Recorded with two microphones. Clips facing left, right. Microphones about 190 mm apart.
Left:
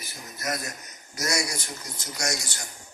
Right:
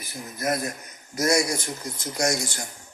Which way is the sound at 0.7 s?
55° right (ahead or behind).